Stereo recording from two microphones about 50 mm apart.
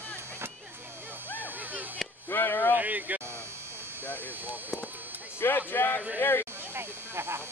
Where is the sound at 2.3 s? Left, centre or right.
Left.